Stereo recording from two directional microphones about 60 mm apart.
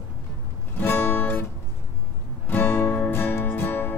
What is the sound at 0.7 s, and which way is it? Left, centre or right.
Music, left.